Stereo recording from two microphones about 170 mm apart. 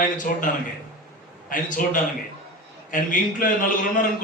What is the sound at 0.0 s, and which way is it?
A man's voice, 50° left (ahead or behind).